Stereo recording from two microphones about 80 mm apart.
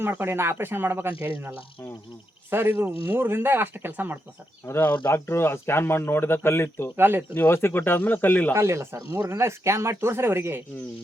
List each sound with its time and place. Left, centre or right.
0.0 s speech: right
2.5 s speech: right
4.6 s speech: left
6.9 s speech: right
7.3 s speech: left
8.5 s speech: right